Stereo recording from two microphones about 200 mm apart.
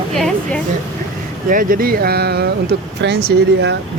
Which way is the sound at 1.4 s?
45° right (ahead or behind).